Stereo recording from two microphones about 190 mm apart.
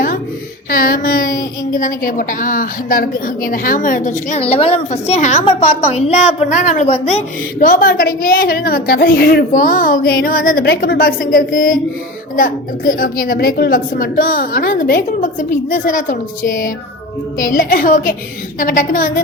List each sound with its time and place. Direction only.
0.7 s a woman's voice: 50° left (ahead or behind)